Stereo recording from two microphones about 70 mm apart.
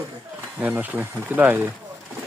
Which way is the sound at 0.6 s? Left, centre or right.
Right.